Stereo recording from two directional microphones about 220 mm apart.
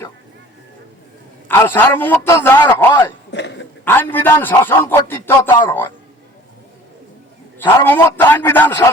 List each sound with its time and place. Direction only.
1.5 s a man's voice: 10° left (ahead or behind)
3.3 s a sound: 55° left (ahead or behind)
3.8 s a man's voice: 10° left (ahead or behind)
7.6 s a man's voice: 10° left (ahead or behind)